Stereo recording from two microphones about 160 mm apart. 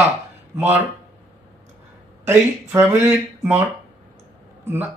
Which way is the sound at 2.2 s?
15° right (ahead or behind).